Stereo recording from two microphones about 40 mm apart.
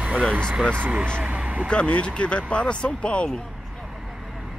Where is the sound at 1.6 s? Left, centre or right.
Left.